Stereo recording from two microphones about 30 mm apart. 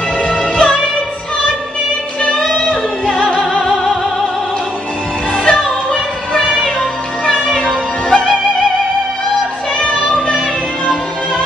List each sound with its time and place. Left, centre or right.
0.6 s music: left
2.5 s music: left
3.6 s music: centre
5.5 s music: left
9.9 s music: left